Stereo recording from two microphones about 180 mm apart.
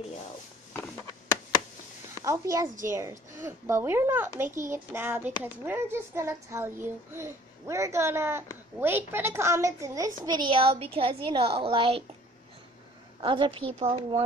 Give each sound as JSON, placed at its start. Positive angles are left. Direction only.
{"t": 2.2, "sound": "a woman's voice", "side_deg": -15}
{"t": 13.2, "sound": "a woman's voice", "side_deg": -25}